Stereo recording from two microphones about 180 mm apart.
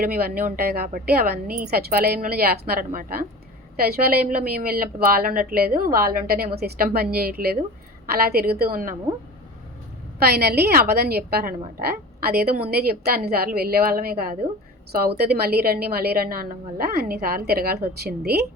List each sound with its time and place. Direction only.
0.0 s a woman's voice: 55° right (ahead or behind)
10.2 s a woman's voice: 60° right (ahead or behind)